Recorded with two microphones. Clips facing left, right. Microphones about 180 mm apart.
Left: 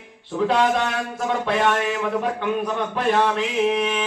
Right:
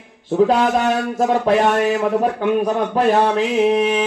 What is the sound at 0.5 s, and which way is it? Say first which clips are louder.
A man's voice: right 4 dB; 40° right (ahead or behind).